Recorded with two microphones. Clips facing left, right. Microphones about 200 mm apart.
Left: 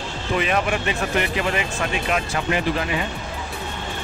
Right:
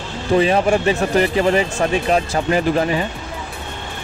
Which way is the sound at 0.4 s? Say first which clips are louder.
Right 7 dB; 30° right (ahead or behind).